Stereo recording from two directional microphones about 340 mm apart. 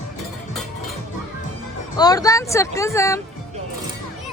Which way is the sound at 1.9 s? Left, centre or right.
Centre.